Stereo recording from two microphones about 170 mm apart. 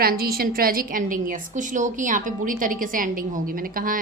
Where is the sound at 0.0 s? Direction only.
60° right (ahead or behind).